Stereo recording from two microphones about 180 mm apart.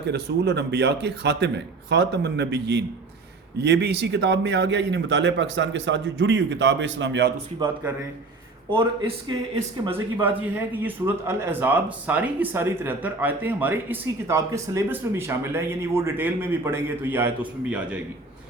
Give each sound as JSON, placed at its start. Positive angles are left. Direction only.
{"t": 0.0, "sound": "a man's voice", "side_deg": -70}
{"t": 8.7, "sound": "a man's voice", "side_deg": -25}
{"t": 10.2, "sound": "a man's voice", "side_deg": -10}